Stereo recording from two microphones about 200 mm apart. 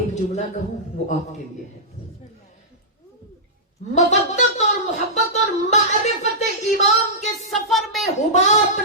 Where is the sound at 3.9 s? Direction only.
35° left (ahead or behind).